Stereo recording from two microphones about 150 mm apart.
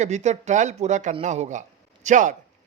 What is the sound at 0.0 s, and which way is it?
A man's voice, 50° right (ahead or behind).